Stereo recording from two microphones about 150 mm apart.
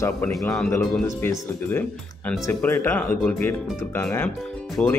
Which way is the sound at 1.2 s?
15° left (ahead or behind).